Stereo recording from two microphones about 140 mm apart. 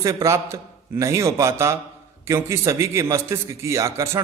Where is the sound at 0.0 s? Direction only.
25° right (ahead or behind).